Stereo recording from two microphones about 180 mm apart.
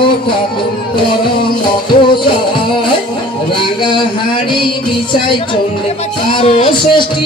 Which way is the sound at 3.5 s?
25° left (ahead or behind).